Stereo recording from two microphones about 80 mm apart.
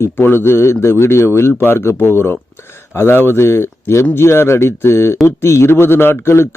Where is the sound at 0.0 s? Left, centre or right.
Left.